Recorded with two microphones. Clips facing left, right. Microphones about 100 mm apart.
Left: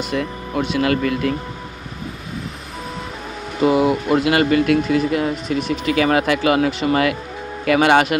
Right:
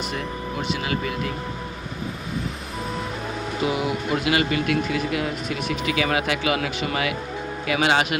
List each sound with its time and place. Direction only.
0.2 s speech: 70° left (ahead or behind)
3.6 s speech: 45° left (ahead or behind)
7.6 s speech: 50° left (ahead or behind)